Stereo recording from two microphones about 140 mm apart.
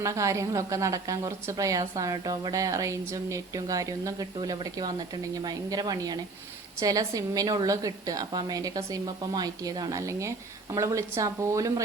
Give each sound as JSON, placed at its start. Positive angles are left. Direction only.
{"t": 0.0, "sound": "a woman's voice", "side_deg": -20}